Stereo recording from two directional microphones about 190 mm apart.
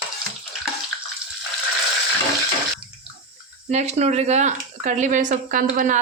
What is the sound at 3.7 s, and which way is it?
Speech, 35° right (ahead or behind).